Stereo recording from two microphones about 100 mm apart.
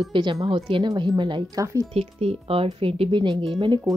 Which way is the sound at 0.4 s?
65° right (ahead or behind).